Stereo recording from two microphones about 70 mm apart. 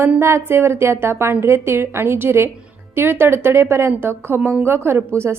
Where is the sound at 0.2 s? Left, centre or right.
Right.